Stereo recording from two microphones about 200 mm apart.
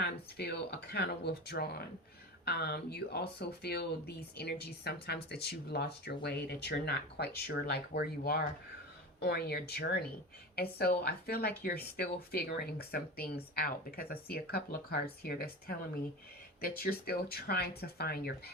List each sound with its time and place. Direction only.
0.0 s speech: 55° left (ahead or behind)